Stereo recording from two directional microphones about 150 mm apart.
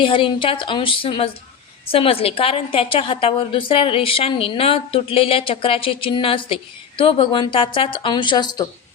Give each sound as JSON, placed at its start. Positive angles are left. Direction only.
{"t": 0.0, "sound": "a woman's voice", "side_deg": 35}